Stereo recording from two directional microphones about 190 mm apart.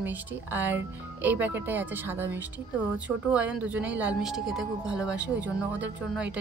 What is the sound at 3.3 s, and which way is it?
Speech, 5° right (ahead or behind).